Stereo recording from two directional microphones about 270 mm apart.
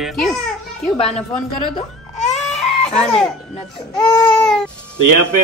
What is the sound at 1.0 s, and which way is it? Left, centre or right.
Speech, left.